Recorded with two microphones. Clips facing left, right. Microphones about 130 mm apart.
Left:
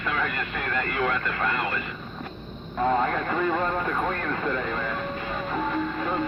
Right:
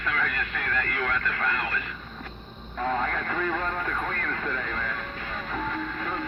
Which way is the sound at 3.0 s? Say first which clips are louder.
Left 4 dB; 25° left (ahead or behind).